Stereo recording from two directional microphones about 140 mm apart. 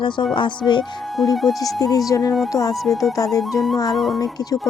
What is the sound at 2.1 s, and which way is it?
Speech, 25° left (ahead or behind).